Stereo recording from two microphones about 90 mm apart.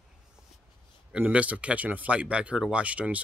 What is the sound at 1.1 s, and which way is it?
Speech, 15° right (ahead or behind).